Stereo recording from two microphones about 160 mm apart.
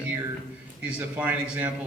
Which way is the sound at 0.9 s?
10° right (ahead or behind).